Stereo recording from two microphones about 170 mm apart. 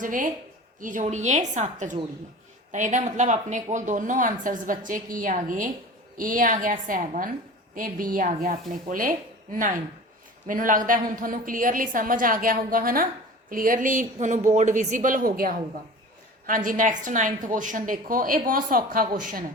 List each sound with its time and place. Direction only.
0.0 s a woman's voice: 50° right (ahead or behind)